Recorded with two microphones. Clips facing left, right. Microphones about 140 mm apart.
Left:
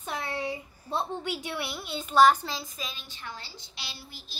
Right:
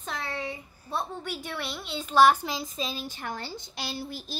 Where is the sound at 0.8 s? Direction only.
20° left (ahead or behind).